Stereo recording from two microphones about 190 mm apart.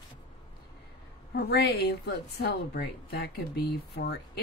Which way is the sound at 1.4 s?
60° left (ahead or behind).